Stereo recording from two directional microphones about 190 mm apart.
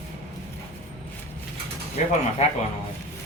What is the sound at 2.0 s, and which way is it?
Speech, 40° left (ahead or behind).